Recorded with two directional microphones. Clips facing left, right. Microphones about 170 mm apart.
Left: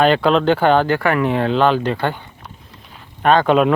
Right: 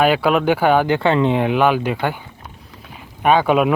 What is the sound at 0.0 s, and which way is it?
Speech, 10° right (ahead or behind).